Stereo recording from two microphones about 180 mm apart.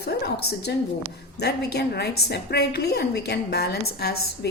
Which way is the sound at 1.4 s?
65° left (ahead or behind).